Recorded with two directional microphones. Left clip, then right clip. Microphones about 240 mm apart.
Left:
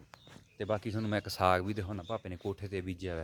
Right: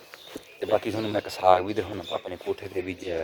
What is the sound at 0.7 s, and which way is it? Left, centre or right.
Speech, centre.